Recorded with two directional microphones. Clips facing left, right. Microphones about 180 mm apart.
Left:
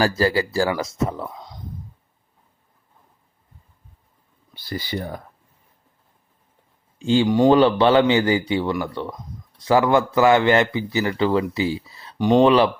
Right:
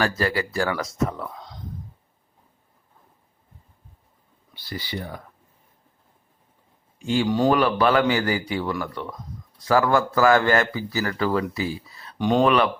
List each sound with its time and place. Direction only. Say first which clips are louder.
0.2 s speech: left 4 dB; 30° left (ahead or behind)
1.2 s a sound: left 2 dB; 15° left (ahead or behind)
4.5 s speech: left 4 dB; 45° left (ahead or behind)
7.0 s speech: left 5 dB; 25° left (ahead or behind)
7.3 s speech: left 4 dB; 15° left (ahead or behind)
7.5 s speech: left 5 dB; 25° left (ahead or behind)